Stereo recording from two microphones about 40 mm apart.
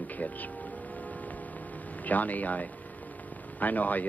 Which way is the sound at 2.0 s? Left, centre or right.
Left.